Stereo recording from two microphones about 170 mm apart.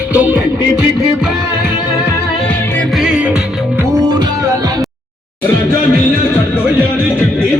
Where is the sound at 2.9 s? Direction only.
5° right (ahead or behind).